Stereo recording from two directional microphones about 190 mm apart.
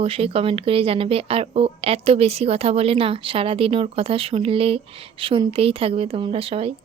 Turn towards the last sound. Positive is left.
turn(degrees=-30)  # may be behind; listen again after turning